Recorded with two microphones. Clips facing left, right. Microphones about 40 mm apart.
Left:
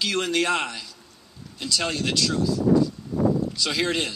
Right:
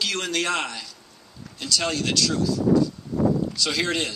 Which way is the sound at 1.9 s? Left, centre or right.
Centre.